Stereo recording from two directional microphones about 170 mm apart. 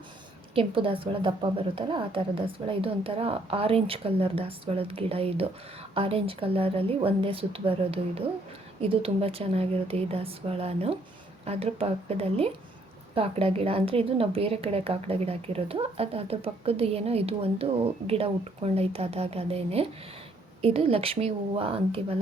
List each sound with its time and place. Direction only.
0.5 s a woman's voice: 30° right (ahead or behind)